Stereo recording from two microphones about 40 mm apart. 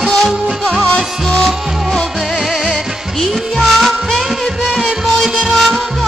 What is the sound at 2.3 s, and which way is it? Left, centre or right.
Music, centre.